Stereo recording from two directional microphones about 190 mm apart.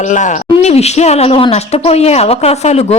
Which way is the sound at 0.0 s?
40° left (ahead or behind).